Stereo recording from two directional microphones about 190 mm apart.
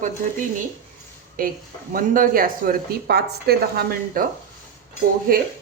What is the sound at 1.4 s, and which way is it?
Speech, 45° right (ahead or behind).